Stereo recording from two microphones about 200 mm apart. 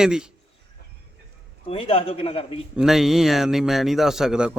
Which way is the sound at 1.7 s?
30° left (ahead or behind).